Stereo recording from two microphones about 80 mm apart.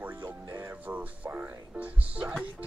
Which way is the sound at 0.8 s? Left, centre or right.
Centre.